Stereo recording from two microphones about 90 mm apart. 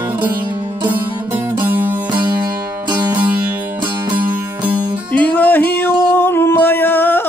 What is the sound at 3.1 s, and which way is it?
Music, 20° right (ahead or behind).